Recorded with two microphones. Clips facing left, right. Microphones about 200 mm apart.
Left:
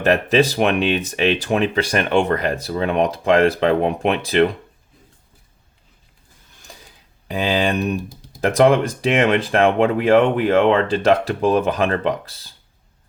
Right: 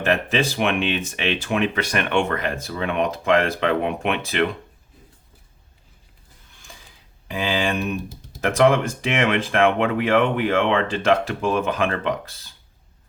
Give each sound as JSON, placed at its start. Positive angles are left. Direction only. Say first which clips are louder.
{"t": 0.0, "sound": "speech", "louder": "left 5 dB", "side_deg": 40}
{"t": 6.5, "sound": "ratchet", "louder": "left 3 dB", "side_deg": 40}
{"t": 7.3, "sound": "speech", "louder": "left 4 dB", "side_deg": 35}